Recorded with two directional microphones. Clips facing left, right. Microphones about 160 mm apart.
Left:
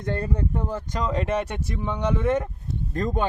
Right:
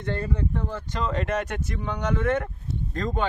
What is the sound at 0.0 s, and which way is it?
Speech, 45° left (ahead or behind).